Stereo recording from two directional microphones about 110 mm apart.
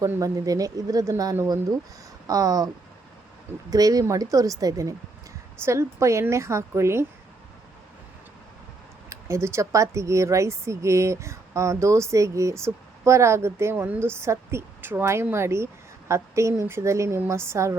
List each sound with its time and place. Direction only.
0.2 s speech: 35° right (ahead or behind)
3.7 s speech: 35° right (ahead or behind)
9.0 s speech: 25° right (ahead or behind)